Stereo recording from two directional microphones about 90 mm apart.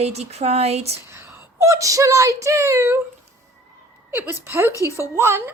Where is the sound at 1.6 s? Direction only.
40° right (ahead or behind).